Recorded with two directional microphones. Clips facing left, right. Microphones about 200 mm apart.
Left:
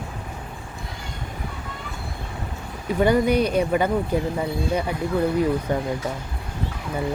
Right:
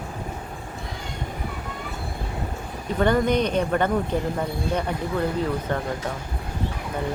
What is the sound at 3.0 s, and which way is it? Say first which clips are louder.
Speech: left 2 dB; 10° left (ahead or behind).